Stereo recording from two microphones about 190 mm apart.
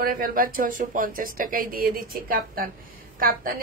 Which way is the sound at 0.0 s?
45° right (ahead or behind).